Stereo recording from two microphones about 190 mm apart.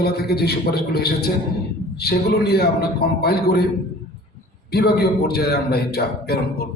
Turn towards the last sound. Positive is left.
turn(degrees=55)  # may be behind; listen again after turning